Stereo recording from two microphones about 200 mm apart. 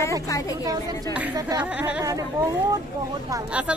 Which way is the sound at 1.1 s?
10° right (ahead or behind).